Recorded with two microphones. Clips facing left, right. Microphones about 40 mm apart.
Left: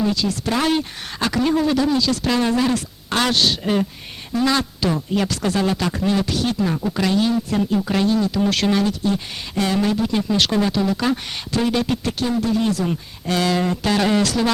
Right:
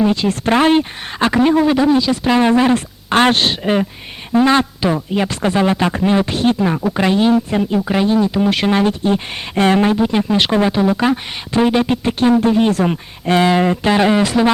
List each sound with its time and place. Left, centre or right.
0.0 s speech: right
8.8 s speech: right
12.2 s speech: right